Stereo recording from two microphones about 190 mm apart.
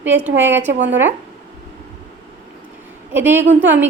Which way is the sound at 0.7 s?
70° right (ahead or behind).